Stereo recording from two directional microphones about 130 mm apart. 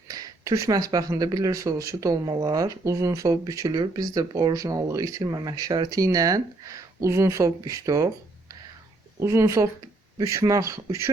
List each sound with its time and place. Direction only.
0.1 s speech: 30° right (ahead or behind)
9.1 s speech: 25° right (ahead or behind)